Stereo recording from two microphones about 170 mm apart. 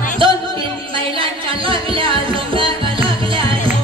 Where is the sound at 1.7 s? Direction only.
30° right (ahead or behind).